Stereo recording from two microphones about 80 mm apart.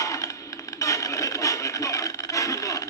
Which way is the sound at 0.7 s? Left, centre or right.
Left.